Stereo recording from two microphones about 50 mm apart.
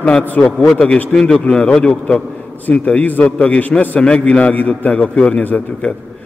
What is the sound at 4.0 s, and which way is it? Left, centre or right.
A man's voice, left.